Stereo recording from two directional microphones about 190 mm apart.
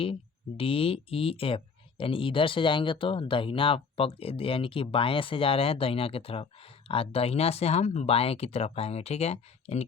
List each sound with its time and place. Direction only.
0.0 s speech: 30° left (ahead or behind)